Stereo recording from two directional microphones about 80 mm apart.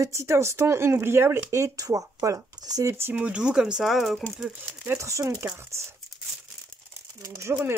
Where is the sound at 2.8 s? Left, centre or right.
Right.